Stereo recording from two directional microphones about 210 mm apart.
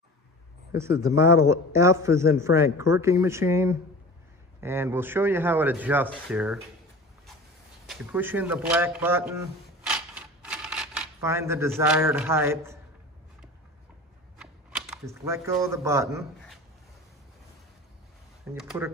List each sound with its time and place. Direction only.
1.0 s a man's voice: 15° right (ahead or behind)
7.8 s a man's voice: 5° right (ahead or behind)
9.8 s a sound: 5° right (ahead or behind)
14.4 s a sound: 5° right (ahead or behind)
15.0 s a man's voice: 15° right (ahead or behind)
18.5 s a man's voice: 5° right (ahead or behind)